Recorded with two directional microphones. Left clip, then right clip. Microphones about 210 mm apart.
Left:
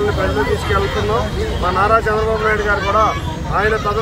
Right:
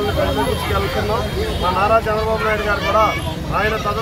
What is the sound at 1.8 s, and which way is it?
Speech, 20° left (ahead or behind).